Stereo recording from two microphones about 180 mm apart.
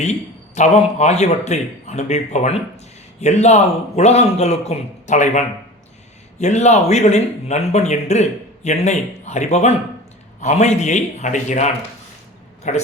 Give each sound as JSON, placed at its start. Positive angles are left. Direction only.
{"t": 0.0, "sound": "a man's voice", "side_deg": 40}